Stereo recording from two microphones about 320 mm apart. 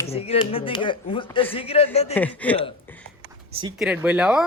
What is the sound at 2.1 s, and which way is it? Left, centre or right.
Speech, centre.